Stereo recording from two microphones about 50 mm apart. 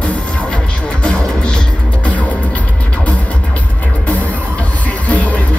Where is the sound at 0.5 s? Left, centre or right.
Centre.